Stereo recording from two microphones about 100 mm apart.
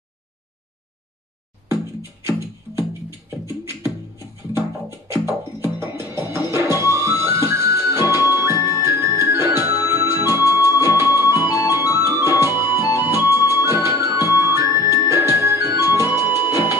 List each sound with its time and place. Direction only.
3.4 s music: 25° right (ahead or behind)
5.0 s music: 25° right (ahead or behind)